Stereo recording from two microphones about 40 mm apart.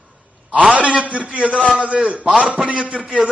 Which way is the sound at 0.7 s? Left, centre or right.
Right.